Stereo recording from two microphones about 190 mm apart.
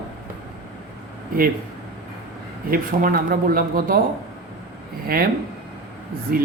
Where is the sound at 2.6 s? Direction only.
50° right (ahead or behind).